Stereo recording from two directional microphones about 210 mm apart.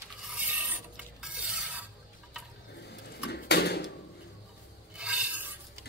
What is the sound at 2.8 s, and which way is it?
Water, 50° left (ahead or behind).